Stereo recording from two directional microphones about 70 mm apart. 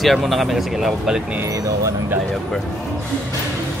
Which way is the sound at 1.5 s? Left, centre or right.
Right.